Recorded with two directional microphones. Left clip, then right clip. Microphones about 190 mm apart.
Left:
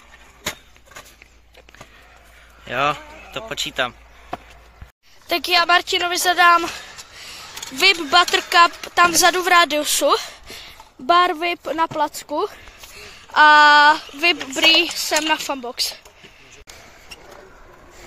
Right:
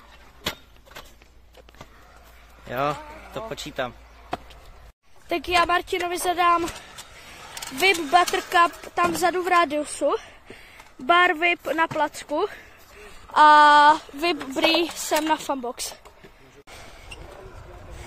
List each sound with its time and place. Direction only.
2.7 s speech: centre (ahead or behind)
7.8 s speech: centre (ahead or behind)
9.9 s speech: 20° left (ahead or behind)
13.3 s speech: 10° right (ahead or behind)